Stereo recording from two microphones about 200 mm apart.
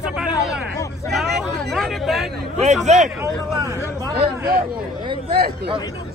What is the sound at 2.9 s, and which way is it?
Speech, 35° right (ahead or behind).